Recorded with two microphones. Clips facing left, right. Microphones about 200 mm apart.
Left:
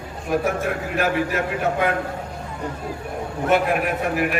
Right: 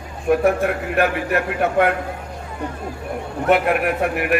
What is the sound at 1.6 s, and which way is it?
Speech, 60° right (ahead or behind).